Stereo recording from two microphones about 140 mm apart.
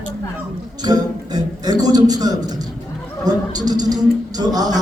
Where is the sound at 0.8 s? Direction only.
30° right (ahead or behind).